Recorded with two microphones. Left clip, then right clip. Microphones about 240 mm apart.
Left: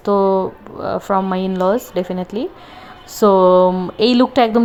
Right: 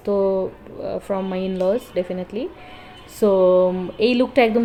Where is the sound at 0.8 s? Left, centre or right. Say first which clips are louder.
Left 7 dB; left.